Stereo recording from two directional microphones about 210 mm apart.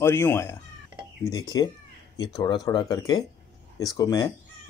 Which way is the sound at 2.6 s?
20° left (ahead or behind).